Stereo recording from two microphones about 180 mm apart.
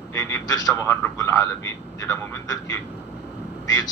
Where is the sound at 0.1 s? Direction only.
15° left (ahead or behind).